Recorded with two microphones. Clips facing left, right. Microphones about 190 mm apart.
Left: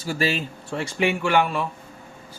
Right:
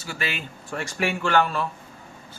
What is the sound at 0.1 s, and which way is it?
Speech, 35° left (ahead or behind).